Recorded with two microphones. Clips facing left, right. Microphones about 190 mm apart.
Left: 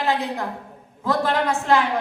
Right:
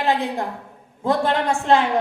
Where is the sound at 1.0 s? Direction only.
25° right (ahead or behind).